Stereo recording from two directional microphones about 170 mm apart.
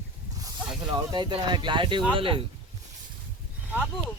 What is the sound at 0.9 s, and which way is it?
Speech, 25° right (ahead or behind).